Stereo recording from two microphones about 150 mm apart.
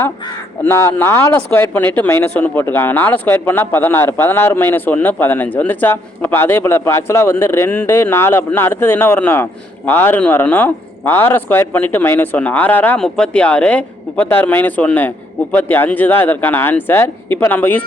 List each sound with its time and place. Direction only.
0.6 s speech: 20° left (ahead or behind)